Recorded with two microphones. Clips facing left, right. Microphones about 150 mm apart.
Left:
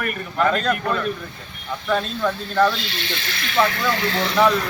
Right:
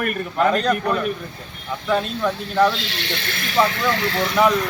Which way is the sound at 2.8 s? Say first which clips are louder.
Right 1 dB; 75° right (ahead or behind).